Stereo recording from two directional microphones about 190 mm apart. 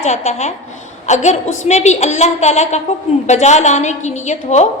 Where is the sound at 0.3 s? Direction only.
35° left (ahead or behind).